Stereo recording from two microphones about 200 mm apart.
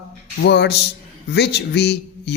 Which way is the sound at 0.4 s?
55° left (ahead or behind).